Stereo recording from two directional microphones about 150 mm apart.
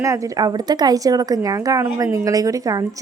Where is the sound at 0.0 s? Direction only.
20° right (ahead or behind).